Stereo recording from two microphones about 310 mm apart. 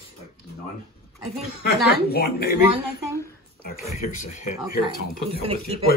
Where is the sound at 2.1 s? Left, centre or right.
Left.